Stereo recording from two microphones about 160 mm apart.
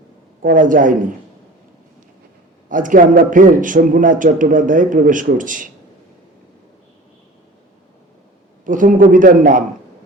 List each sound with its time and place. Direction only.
0.4 s a man's voice: 55° right (ahead or behind)
2.6 s a man's voice: 55° right (ahead or behind)
8.6 s a man's voice: 55° right (ahead or behind)